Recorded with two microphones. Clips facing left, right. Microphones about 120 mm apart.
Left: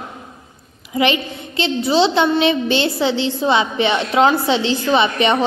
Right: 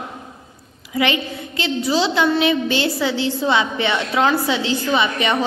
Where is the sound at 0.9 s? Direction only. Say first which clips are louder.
Left 2 dB; 20° left (ahead or behind).